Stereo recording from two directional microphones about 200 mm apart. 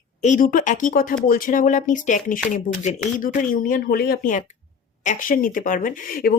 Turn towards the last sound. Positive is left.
turn(degrees=45)  # may be behind; listen again after turning